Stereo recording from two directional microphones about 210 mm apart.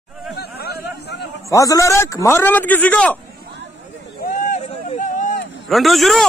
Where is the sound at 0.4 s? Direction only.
50° left (ahead or behind).